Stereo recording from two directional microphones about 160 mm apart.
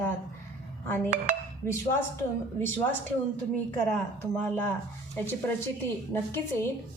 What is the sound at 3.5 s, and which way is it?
A woman's voice, 10° left (ahead or behind).